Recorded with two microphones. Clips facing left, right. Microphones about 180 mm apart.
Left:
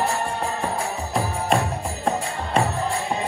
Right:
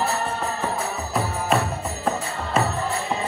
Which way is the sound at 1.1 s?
30° left (ahead or behind).